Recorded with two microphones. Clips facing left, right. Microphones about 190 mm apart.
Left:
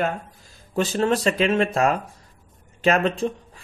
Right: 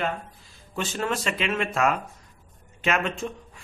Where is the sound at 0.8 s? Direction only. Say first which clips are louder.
Left 7 dB; 35° left (ahead or behind).